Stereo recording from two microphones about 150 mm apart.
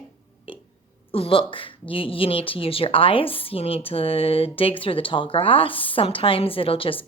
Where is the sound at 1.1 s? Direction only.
40° left (ahead or behind).